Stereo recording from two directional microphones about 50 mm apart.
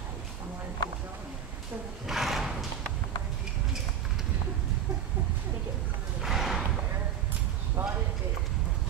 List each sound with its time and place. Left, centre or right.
2.0 s a sound: centre
6.2 s horse: centre
7.8 s clip-clop: right